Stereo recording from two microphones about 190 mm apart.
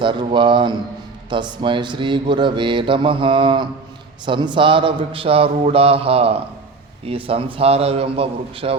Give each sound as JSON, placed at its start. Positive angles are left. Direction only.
{"t": 0.0, "sound": "speech", "side_deg": -25}